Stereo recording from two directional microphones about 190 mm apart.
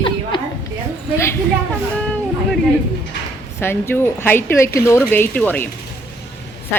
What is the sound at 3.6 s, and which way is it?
Speech, 10° left (ahead or behind).